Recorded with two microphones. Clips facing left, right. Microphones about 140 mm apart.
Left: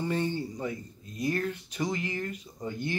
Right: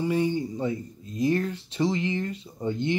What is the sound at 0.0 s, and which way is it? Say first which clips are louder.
Speech: right 5 dB; 10° right (ahead or behind).